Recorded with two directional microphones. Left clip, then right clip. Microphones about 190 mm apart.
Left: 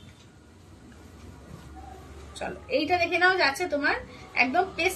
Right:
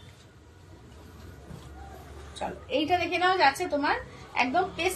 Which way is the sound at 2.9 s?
15° left (ahead or behind).